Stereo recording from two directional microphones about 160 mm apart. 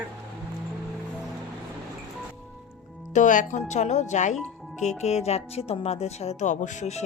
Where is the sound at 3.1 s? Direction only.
50° left (ahead or behind).